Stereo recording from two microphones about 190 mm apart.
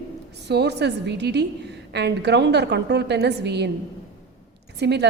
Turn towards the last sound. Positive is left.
turn(degrees=-60)  # may be behind; listen again after turning